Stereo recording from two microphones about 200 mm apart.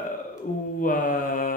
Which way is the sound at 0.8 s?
45° left (ahead or behind).